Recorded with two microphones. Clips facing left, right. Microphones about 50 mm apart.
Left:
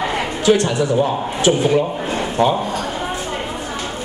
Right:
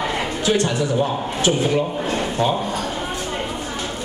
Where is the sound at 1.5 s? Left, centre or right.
Centre.